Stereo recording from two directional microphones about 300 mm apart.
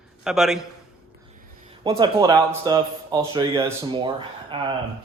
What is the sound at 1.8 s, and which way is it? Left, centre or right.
A man's voice, centre.